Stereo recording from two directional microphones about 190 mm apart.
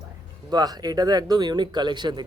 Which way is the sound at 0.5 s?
20° right (ahead or behind).